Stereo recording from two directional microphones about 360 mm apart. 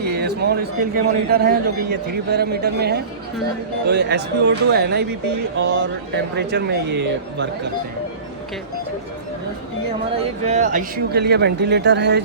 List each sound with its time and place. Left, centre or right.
0.0 s a man's voice: right
10.4 s a man's voice: centre